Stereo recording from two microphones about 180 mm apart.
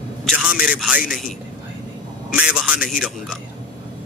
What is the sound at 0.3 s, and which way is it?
A man's voice, 5° right (ahead or behind).